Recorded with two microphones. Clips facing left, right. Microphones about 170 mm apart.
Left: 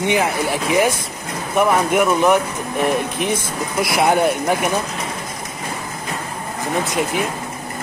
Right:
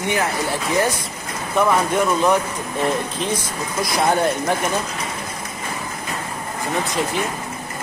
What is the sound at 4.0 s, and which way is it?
Speech, 10° left (ahead or behind).